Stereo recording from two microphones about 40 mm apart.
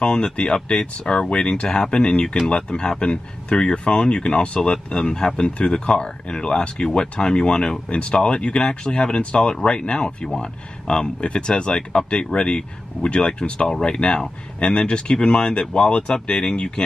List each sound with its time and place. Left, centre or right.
0.0 s speech: left